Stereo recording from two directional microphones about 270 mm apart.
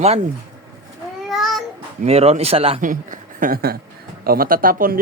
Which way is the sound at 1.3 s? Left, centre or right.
Centre.